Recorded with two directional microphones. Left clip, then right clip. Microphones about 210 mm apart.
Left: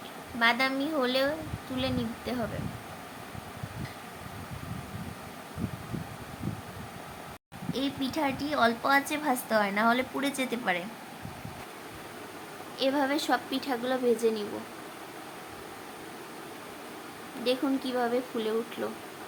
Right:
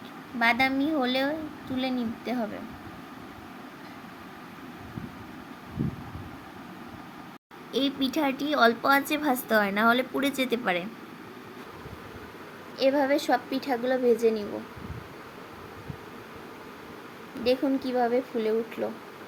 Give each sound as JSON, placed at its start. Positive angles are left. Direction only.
{"t": 0.3, "sound": "a woman's voice", "side_deg": -10}
{"t": 7.7, "sound": "a woman's voice", "side_deg": -15}
{"t": 12.8, "sound": "a woman's voice", "side_deg": -10}
{"t": 17.4, "sound": "a woman's voice", "side_deg": -10}